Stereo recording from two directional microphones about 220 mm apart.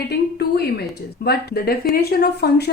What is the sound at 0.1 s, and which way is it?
Speech, 45° left (ahead or behind).